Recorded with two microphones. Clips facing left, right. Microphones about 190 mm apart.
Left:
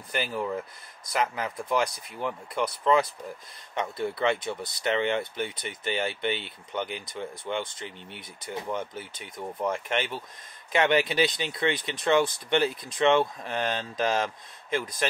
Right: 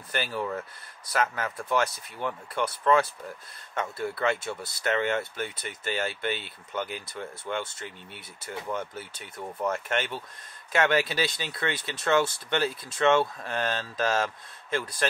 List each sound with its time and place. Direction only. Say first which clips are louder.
0.1 s speech: left 1 dB; 15° left (ahead or behind)